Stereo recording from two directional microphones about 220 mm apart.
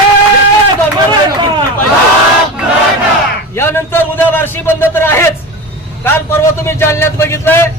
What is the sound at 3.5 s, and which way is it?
A man's voice, 10° left (ahead or behind).